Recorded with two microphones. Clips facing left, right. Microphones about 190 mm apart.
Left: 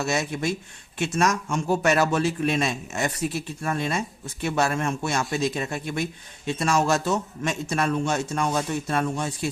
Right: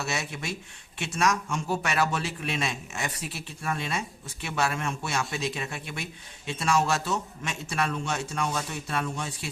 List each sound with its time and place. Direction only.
0.0 s a man's voice: 45° left (ahead or behind)